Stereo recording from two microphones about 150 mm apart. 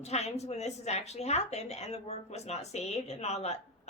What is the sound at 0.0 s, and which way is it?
A woman's voice, 45° left (ahead or behind).